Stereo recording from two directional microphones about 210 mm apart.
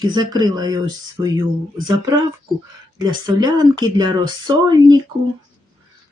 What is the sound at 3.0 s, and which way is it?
Speech, 20° right (ahead or behind).